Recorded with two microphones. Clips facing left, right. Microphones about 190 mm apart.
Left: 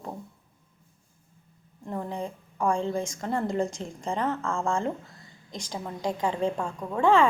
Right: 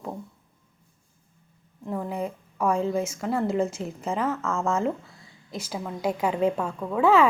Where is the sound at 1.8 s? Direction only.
5° right (ahead or behind).